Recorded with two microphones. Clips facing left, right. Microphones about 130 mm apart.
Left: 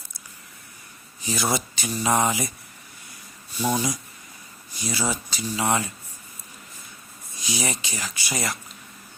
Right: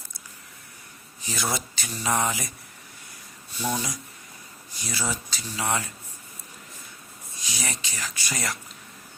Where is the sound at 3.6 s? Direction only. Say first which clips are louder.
Left 5 dB; 10° left (ahead or behind).